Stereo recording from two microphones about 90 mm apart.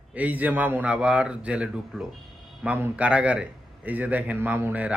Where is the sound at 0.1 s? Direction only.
15° right (ahead or behind).